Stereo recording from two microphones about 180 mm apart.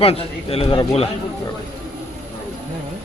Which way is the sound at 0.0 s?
30° left (ahead or behind).